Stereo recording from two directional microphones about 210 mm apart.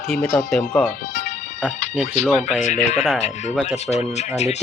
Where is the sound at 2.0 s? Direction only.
35° left (ahead or behind).